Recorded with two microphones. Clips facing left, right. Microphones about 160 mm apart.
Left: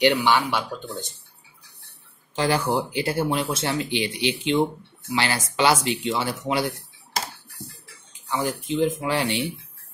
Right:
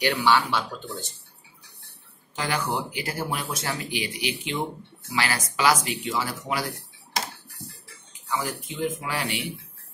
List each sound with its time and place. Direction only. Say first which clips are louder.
0.0 s speech: left 3 dB; 20° left (ahead or behind)
2.3 s speech: left 5 dB; 30° left (ahead or behind)
8.3 s speech: left 5 dB; 30° left (ahead or behind)